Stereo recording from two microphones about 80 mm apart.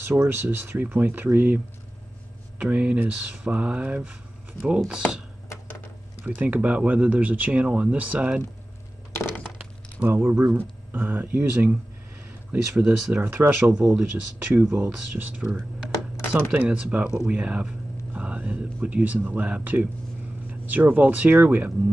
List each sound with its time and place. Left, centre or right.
0.0 s speech: right
2.6 s speech: centre
6.2 s speech: right
9.1 s a sound: left
9.9 s speech: right
12.8 s speech: right
16.6 s speech: centre